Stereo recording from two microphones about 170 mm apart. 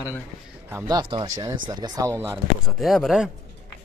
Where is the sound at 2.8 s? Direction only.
Centre (ahead or behind).